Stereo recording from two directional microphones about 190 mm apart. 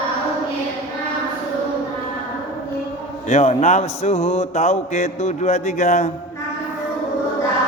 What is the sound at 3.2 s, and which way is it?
Speech, 35° left (ahead or behind).